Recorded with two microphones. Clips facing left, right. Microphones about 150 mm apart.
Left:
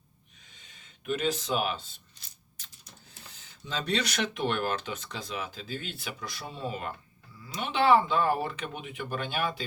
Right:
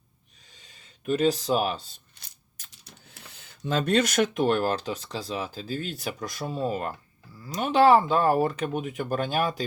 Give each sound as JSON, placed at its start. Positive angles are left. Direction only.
{"t": 0.6, "sound": "speech", "side_deg": -35}
{"t": 2.2, "sound": "a sound", "side_deg": -60}
{"t": 3.3, "sound": "speech", "side_deg": -55}